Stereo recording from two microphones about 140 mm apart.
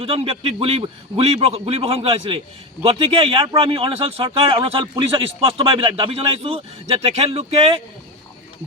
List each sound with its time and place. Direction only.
0.0 s a man's voice: 45° right (ahead or behind)